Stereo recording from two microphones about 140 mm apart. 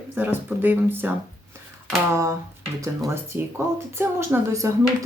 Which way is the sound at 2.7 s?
20° right (ahead or behind).